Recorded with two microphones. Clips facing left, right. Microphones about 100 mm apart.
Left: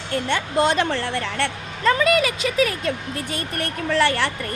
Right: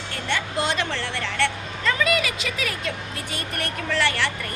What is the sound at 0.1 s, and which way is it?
A woman's voice, 40° left (ahead or behind).